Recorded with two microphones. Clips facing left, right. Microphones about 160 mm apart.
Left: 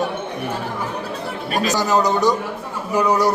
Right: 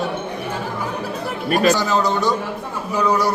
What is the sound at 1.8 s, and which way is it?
A man's voice, 15° left (ahead or behind).